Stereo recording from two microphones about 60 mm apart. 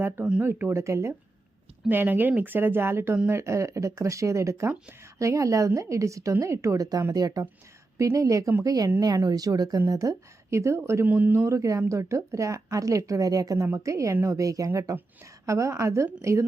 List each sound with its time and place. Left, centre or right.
0.4 s speech: right
1.9 s a woman's voice: right
7.1 s speech: right
7.9 s a woman's voice: right
8.6 s speech: right
10.5 s speech: right
11.0 s speech: right
11.3 s a woman's voice: right
13.7 s a woman's voice: right